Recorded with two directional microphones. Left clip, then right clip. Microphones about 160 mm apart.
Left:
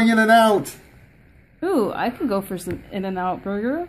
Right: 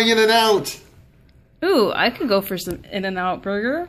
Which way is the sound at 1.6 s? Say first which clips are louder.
Right 4 dB; 5° right (ahead or behind).